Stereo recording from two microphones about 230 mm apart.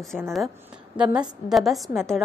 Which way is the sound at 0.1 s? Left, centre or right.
Centre.